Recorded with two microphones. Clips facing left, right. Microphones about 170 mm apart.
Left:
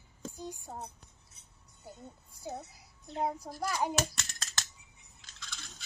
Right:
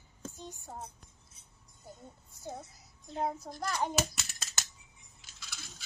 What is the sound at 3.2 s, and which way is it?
Child singing, 10° left (ahead or behind).